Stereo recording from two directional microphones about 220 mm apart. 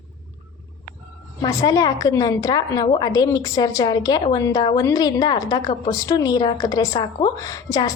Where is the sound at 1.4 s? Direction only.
15° left (ahead or behind).